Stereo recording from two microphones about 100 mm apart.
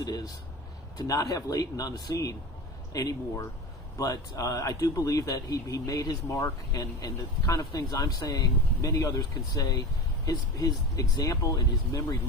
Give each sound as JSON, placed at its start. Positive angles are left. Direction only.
{"t": 0.0, "sound": "a man's voice", "side_deg": 40}